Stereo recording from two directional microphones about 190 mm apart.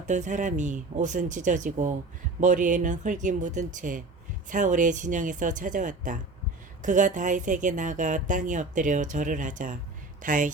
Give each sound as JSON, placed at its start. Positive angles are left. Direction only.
{"t": 0.0, "sound": "a woman's voice", "side_deg": -40}